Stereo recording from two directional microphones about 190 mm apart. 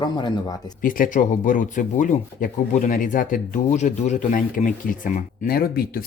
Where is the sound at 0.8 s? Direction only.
45° left (ahead or behind).